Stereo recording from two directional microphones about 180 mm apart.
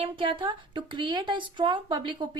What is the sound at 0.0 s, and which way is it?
A woman's voice, 30° right (ahead or behind).